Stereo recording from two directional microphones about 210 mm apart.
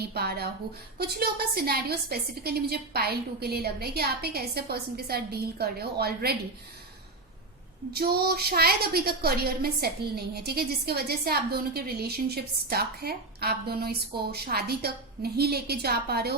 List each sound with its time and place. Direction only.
0.1 s a woman's voice: 50° right (ahead or behind)
7.9 s a woman's voice: 45° right (ahead or behind)